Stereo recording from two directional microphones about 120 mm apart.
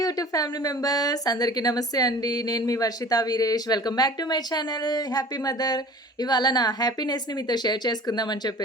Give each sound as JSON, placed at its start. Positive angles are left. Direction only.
{"t": 0.0, "sound": "speech", "side_deg": 30}